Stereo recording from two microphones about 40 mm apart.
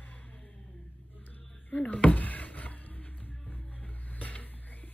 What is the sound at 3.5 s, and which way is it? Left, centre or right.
Music, left.